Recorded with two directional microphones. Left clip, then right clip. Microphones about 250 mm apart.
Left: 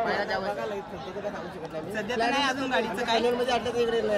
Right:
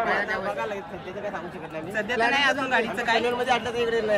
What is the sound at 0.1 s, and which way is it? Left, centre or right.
Chatter, left.